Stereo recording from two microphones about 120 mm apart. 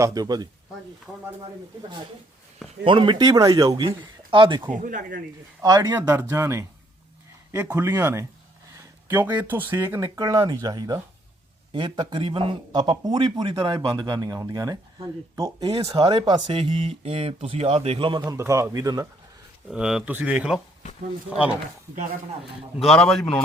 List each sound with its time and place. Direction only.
0.0 s a man's voice: 30° right (ahead or behind)
2.8 s a man's voice: 40° right (ahead or behind)
3.8 s speech: 45° right (ahead or behind)
4.7 s speech: 90° right
5.6 s a man's voice: 35° right (ahead or behind)
6.1 s speech: 20° right (ahead or behind)
7.9 s speech: 25° right (ahead or behind)
9.0 s speech: 15° right (ahead or behind)
10.2 s a man's voice: 30° right (ahead or behind); by 18.2 s 45° right (ahead or behind)
18.3 s speech: 25° right (ahead or behind)
19.7 s speech: 5° right (ahead or behind)
22.8 s a man's voice: 5° left (ahead or behind)